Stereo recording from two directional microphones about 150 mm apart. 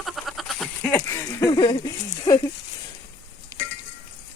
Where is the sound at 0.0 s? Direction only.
Centre (ahead or behind).